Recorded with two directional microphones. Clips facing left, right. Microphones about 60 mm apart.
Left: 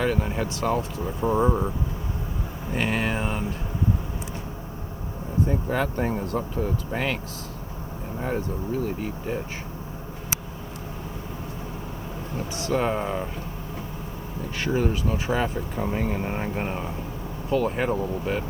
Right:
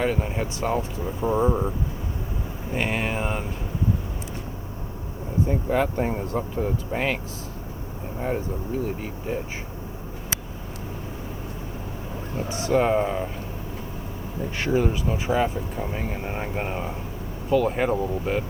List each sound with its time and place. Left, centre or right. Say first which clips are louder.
0.0 s speech: even; right
1.2 s speech: even; centre
2.7 s mantra: even; right
3.2 s speech: right 1 dB; right
5.5 s speech: right 5 dB; right
9.0 s speech: even; centre
12.5 s speech: right 4 dB; right
12.8 s speech: right 4 dB; centre
14.6 s speech: right 1 dB; centre